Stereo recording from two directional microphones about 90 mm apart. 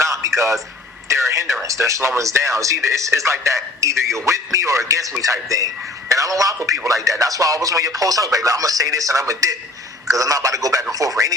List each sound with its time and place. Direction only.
0.0 s a sound: 35° right (ahead or behind)
1.0 s radio: 35° right (ahead or behind)
1.6 s speech: 35° right (ahead or behind)